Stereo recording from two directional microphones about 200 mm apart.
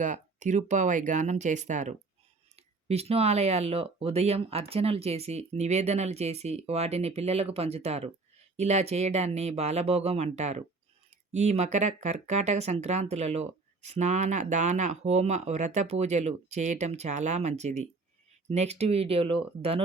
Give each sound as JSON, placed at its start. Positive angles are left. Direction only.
{"t": 0.0, "sound": "speech", "side_deg": -40}